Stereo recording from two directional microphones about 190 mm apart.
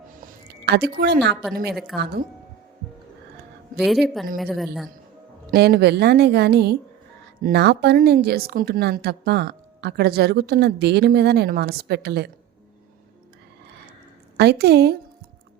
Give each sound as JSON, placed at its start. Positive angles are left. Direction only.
{"t": 0.2, "sound": "a sound", "side_deg": -60}
{"t": 2.0, "sound": "a woman's voice", "side_deg": -55}
{"t": 3.8, "sound": "a woman's voice", "side_deg": 0}
{"t": 5.5, "sound": "a woman's voice", "side_deg": -55}
{"t": 14.3, "sound": "a woman's voice", "side_deg": -60}